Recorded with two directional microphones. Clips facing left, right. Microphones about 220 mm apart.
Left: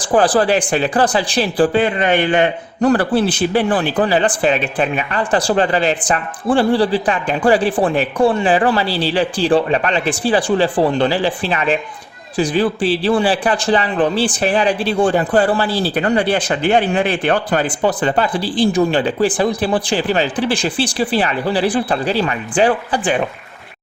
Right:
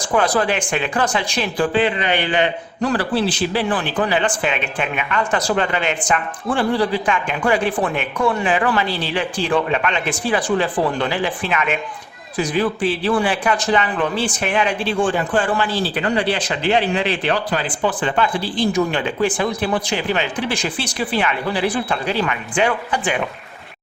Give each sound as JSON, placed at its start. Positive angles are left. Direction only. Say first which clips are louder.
{"t": 0.0, "sound": "speech", "louder": "left 4 dB", "side_deg": 35}